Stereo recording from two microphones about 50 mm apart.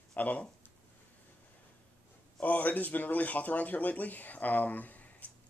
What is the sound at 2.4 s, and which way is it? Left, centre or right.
Speech, left.